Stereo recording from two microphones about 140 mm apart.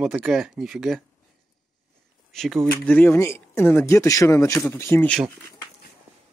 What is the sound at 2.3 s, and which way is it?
Speech, centre (ahead or behind).